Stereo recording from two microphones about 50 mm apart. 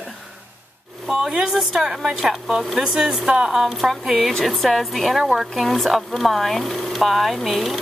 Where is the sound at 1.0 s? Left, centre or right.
Centre.